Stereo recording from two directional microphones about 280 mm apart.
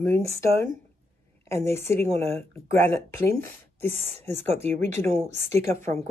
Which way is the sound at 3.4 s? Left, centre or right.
Centre.